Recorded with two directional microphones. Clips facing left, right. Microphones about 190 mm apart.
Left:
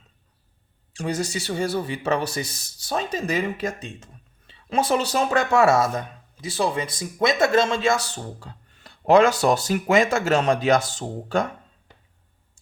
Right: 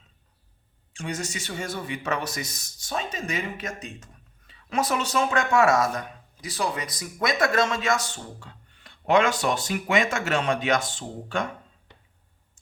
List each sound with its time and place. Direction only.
0.9 s speech: 35° left (ahead or behind)